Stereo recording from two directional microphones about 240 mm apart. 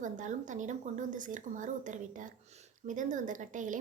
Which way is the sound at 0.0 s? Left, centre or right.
Right.